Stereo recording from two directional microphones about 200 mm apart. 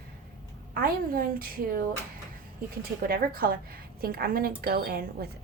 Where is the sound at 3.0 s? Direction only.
50° right (ahead or behind).